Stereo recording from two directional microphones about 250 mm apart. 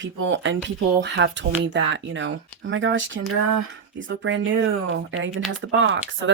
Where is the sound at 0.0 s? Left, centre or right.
Right.